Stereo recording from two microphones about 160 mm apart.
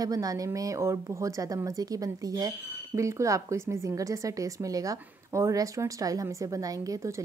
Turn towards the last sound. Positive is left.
turn(degrees=-20)  # may be behind; listen again after turning